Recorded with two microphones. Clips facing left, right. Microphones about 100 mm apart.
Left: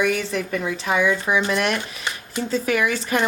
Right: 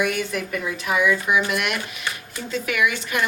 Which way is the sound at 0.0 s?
30° left (ahead or behind).